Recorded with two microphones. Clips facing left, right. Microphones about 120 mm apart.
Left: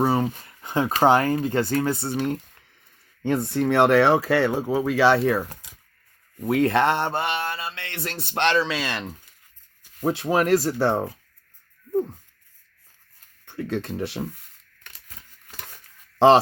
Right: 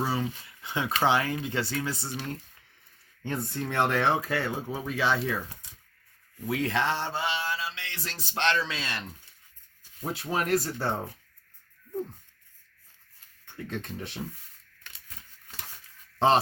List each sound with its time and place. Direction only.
0.0 s mantra: 55° left (ahead or behind)
0.3 s speech: 45° left (ahead or behind); by 2.4 s 60° left (ahead or behind)
3.2 s speech: 75° left (ahead or behind)
6.4 s mantra: 55° left (ahead or behind); by 9.1 s 90° left
9.8 s speech: 75° left (ahead or behind)
13.4 s speech: 65° left (ahead or behind)
14.8 s a sound: 55° left (ahead or behind)
16.1 s speech: 75° left (ahead or behind)